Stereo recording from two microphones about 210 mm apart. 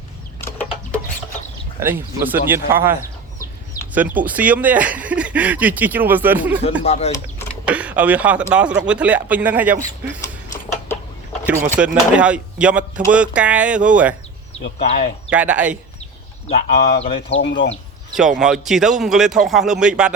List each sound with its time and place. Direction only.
1.8 s speech: 10° right (ahead or behind)
6.8 s speech: 30° left (ahead or behind)
7.7 s speech: 5° right (ahead or behind)
10.2 s a sound: 15° left (ahead or behind)
11.8 s a man's voice: 5° right (ahead or behind)
14.8 s speech: 30° left (ahead or behind)
15.3 s a man's voice: 5° right (ahead or behind)
16.5 s speech: 30° left (ahead or behind)
17.4 s speech: 60° left (ahead or behind)
18.1 s a man's voice: centre (ahead or behind)